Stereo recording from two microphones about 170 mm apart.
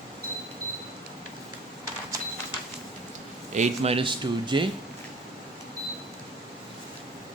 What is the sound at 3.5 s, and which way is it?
Speech, 40° right (ahead or behind).